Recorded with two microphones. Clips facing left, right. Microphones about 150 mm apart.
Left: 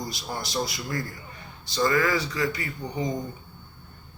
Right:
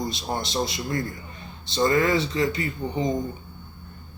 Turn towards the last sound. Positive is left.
turn(degrees=-25)  # may be behind; listen again after turning